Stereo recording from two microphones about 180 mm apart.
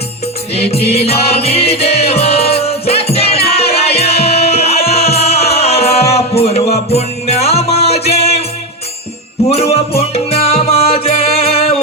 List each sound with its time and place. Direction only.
0.7 s music: 35° left (ahead or behind)
9.5 s music: 35° left (ahead or behind)